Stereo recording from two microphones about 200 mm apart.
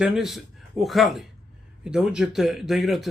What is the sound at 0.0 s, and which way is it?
A man's voice, centre (ahead or behind).